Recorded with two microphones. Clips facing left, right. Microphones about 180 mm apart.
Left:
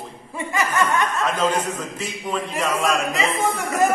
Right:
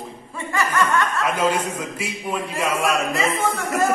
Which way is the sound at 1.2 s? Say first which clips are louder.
Even; 10° right (ahead or behind).